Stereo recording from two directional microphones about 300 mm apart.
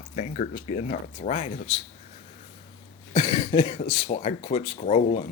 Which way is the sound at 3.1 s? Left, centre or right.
Centre.